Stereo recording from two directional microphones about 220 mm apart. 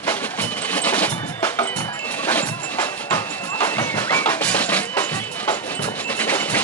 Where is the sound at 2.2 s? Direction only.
5° left (ahead or behind).